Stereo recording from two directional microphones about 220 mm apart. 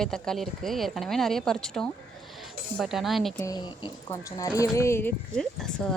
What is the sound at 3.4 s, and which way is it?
Speech, 20° left (ahead or behind).